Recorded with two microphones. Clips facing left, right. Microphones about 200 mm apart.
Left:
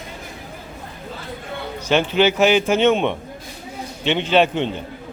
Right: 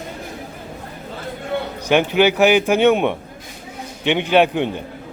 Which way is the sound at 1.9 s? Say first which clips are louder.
Right 2 dB; 15° right (ahead or behind).